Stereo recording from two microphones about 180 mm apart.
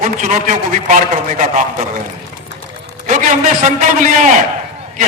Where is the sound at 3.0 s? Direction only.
45° right (ahead or behind).